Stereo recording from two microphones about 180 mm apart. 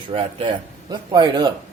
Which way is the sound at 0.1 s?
30° right (ahead or behind).